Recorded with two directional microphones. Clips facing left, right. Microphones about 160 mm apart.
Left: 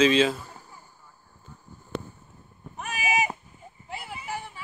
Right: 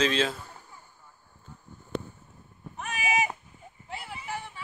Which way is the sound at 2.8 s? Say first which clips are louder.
Left 1 dB; 10° left (ahead or behind).